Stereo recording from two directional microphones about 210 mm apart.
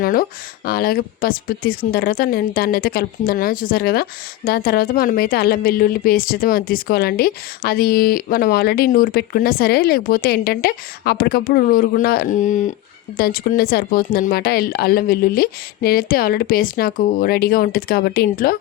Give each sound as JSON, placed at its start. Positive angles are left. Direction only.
{"t": 0.0, "sound": "speech", "side_deg": 45}